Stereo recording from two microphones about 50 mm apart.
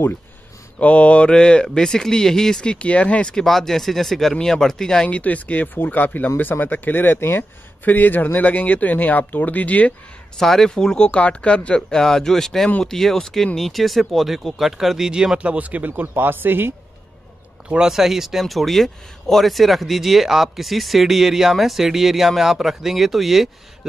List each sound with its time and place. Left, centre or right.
0.7 s speech: left
3.3 s speech: centre
5.0 s speech: left
10.3 s speech: centre
11.1 s speech: left
11.9 s speech: centre; by 15.9 s right
16.0 s speech: right
17.6 s speech: centre